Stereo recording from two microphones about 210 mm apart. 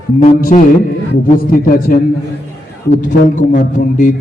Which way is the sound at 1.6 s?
40° left (ahead or behind).